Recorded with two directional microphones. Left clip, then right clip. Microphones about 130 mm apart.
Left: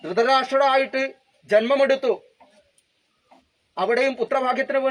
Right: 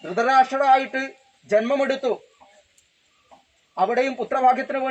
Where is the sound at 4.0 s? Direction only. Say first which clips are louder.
Right 1 dB; 5° left (ahead or behind).